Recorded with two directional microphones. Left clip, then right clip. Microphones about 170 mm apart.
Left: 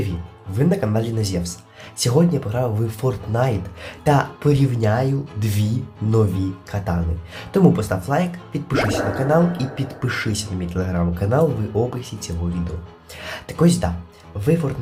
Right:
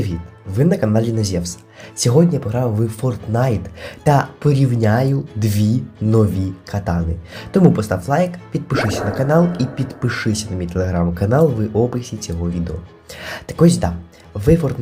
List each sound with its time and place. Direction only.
0.5 s speech: 20° right (ahead or behind)